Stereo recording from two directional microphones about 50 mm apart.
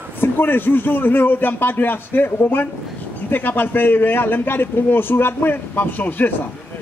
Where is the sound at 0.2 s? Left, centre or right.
Left.